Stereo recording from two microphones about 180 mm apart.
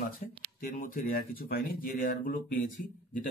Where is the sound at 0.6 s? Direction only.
55° left (ahead or behind).